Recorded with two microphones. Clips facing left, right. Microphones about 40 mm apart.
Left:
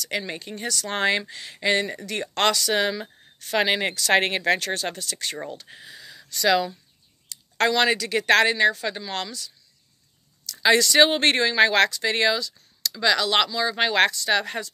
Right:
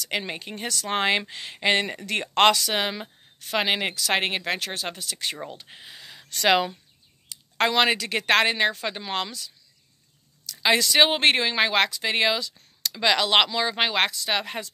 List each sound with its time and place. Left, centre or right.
0.3 s speech: right
3.4 s speech: centre; by 6.8 s right
7.2 s speech: right
10.6 s speech: centre
12.5 s speech: right
13.8 s speech: centre